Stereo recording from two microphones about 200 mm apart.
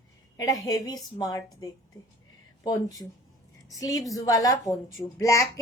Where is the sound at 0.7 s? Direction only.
20° left (ahead or behind).